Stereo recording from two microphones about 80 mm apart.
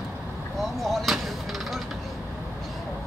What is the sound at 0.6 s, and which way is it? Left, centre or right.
Speech, centre.